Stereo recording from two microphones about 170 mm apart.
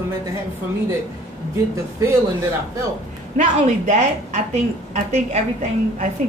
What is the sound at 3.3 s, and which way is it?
A woman's voice, 45° right (ahead or behind).